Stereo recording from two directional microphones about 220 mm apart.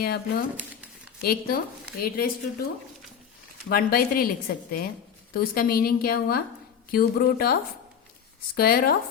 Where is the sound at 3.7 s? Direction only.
45° left (ahead or behind).